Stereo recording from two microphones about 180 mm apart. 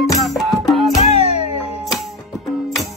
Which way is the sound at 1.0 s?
35° left (ahead or behind).